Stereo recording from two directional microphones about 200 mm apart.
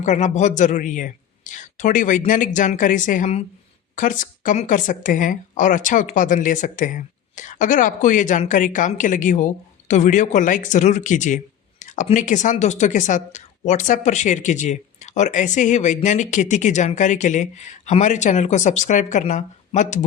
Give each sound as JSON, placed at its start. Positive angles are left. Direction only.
{"t": 0.0, "sound": "speech", "side_deg": 35}